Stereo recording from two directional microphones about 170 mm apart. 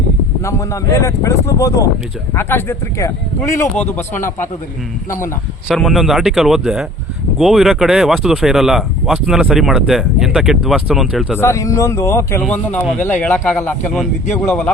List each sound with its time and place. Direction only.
0.4 s speech: 15° left (ahead or behind)
5.6 s speech: centre (ahead or behind)
11.3 s speech: 15° left (ahead or behind)